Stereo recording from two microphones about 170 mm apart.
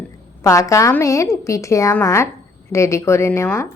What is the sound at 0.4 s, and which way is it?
A woman's voice, 20° left (ahead or behind).